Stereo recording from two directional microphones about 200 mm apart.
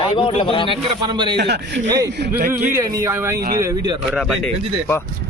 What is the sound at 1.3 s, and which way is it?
Speech, 55° right (ahead or behind).